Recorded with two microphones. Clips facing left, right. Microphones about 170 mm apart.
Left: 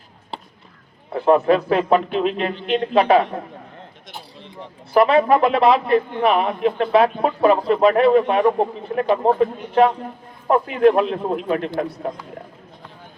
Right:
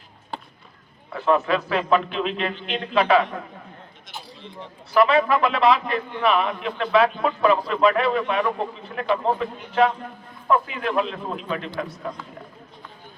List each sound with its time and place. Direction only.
1.2 s a man's voice: 50° left (ahead or behind)
4.9 s a man's voice: 50° left (ahead or behind)